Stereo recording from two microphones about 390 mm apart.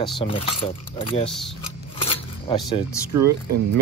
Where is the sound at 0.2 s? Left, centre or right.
Centre.